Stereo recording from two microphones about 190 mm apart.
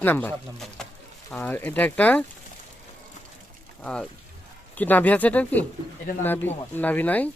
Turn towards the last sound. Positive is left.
turn(degrees=10)  # may be behind; listen again after turning